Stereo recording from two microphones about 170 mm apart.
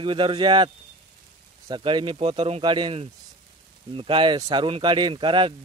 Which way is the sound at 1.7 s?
30° right (ahead or behind).